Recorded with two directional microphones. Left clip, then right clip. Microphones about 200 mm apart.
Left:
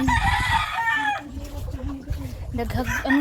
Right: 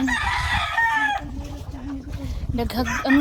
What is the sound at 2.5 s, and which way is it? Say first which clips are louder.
Speech: right 2 dB; 20° right (ahead or behind).